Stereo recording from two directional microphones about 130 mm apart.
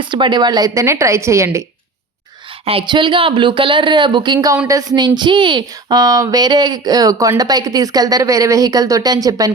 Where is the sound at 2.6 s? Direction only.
40° right (ahead or behind).